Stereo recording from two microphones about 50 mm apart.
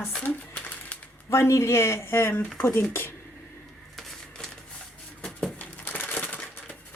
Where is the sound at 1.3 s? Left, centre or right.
Left.